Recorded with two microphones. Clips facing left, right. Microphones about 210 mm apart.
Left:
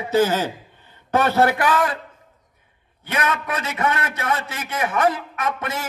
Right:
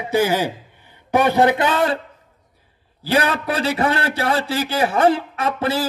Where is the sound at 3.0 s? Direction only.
30° right (ahead or behind).